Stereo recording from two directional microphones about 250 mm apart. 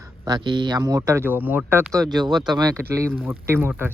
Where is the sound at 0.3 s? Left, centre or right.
Centre.